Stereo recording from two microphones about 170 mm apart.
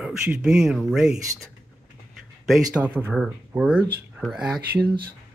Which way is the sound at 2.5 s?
5° right (ahead or behind).